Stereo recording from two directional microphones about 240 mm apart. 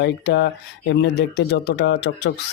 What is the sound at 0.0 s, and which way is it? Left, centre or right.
Speech, left.